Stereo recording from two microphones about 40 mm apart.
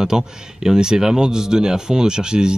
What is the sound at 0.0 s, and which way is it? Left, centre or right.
Speech, centre.